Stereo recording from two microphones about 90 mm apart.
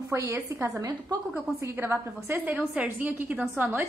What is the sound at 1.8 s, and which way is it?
Speech, 20° right (ahead or behind).